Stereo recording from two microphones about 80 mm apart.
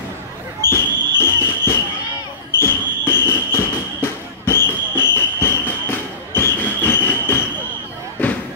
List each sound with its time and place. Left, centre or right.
0.7 s basketball bounce: left
8.2 s music: left